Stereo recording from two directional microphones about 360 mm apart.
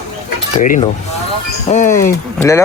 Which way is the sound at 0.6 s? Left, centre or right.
Left.